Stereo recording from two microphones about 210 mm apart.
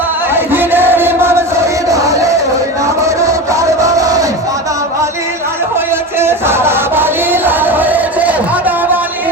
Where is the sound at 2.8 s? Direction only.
15° right (ahead or behind).